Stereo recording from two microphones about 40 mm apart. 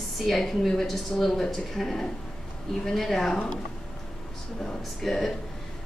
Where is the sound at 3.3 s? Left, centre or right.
Centre.